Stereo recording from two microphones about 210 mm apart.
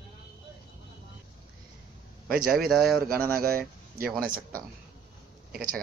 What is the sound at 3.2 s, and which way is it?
Speech, 45° right (ahead or behind).